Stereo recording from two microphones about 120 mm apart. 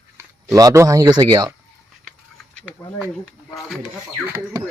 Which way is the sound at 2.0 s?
Centre (ahead or behind).